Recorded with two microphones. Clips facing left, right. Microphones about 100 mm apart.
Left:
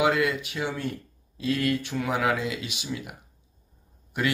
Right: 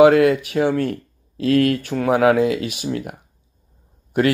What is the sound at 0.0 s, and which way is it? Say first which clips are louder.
Speech: right 12 dB; 50° right (ahead or behind).